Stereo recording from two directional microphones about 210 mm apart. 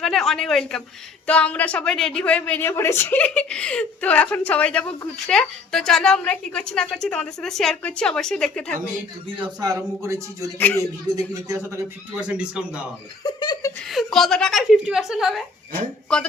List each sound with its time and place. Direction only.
0.0 s a man's voice: centre (ahead or behind)
9.4 s speech: 15° right (ahead or behind)
10.6 s a man's voice: 10° left (ahead or behind)
11.1 s a man's voice: 15° right (ahead or behind)
13.2 s laughter: 20° left (ahead or behind)
13.8 s a man's voice: centre (ahead or behind)